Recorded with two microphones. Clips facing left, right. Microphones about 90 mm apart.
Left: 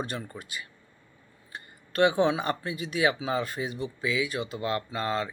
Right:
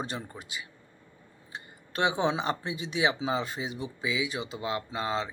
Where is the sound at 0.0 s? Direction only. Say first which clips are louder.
Left 2 dB; 20° right (ahead or behind).